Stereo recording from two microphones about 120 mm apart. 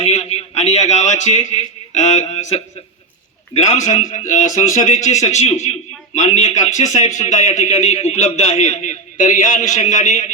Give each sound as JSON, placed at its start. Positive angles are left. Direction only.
{"t": 0.0, "sound": "a man's voice", "side_deg": 60}